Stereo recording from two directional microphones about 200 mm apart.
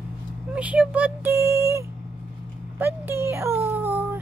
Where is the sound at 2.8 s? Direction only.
10° right (ahead or behind).